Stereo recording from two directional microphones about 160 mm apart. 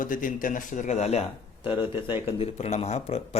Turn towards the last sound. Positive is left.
turn(degrees=40)  # may be behind; listen again after turning